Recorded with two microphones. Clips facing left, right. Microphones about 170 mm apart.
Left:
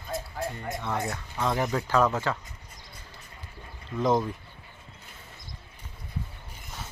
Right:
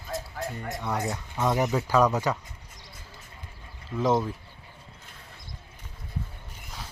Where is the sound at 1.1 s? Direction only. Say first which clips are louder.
Right 2 dB; 15° right (ahead or behind).